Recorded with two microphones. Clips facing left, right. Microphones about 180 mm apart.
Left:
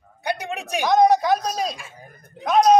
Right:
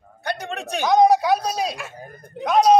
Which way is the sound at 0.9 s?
Centre (ahead or behind).